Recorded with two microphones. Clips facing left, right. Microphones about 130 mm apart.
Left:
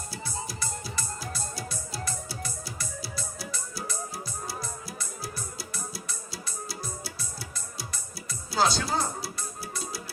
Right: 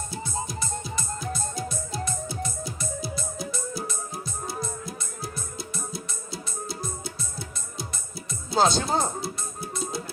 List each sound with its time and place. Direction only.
0.1 s music: 20° right (ahead or behind)